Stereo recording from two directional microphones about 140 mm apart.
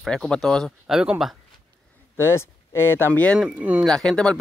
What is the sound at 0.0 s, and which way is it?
Speech, 5° left (ahead or behind).